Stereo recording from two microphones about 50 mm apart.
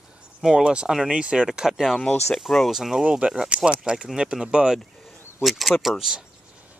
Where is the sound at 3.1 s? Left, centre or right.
Centre.